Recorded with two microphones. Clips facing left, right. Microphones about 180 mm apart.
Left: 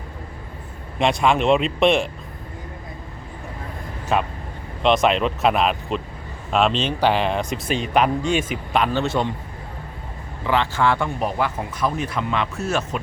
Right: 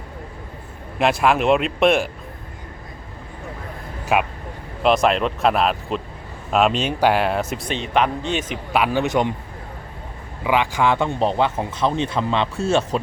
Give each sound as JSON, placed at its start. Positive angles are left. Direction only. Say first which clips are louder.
{"t": 0.9, "sound": "speech", "louder": "right 1 dB", "side_deg": -5}
{"t": 4.1, "sound": "speech", "louder": "right 2 dB", "side_deg": -10}
{"t": 8.7, "sound": "speech", "louder": "right 2 dB", "side_deg": -10}
{"t": 10.4, "sound": "speech", "louder": "right 1 dB", "side_deg": -15}